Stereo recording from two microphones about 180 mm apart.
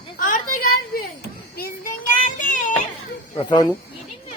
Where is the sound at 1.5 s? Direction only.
50° left (ahead or behind).